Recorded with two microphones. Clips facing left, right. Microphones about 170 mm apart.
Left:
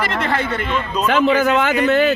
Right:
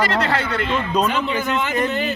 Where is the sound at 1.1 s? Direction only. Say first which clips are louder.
Left 7 dB; 90° left.